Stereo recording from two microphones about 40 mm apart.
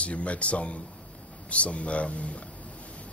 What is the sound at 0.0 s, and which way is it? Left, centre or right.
A man's voice, left.